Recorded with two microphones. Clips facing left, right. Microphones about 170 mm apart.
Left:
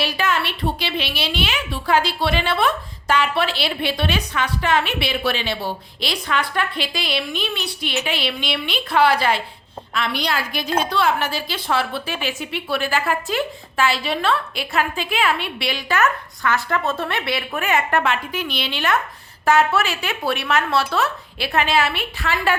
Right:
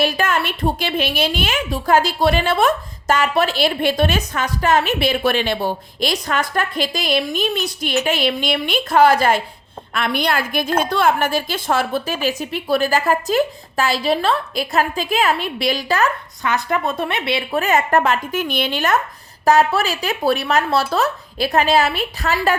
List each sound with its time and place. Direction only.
0.0 s a woman's voice: 45° right (ahead or behind)
16.4 s a woman's voice: 20° right (ahead or behind)
17.6 s a woman's voice: 40° right (ahead or behind)